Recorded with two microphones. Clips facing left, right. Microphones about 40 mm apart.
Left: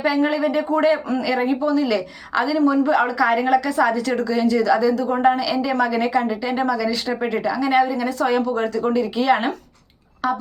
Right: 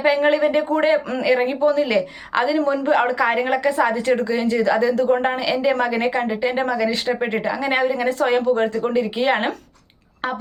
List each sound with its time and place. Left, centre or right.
0.0 s speech: right